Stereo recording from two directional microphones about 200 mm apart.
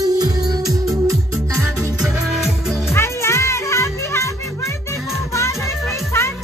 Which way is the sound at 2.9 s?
15° left (ahead or behind).